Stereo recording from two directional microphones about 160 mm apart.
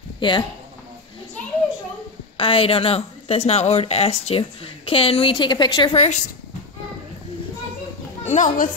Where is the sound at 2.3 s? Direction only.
35° left (ahead or behind).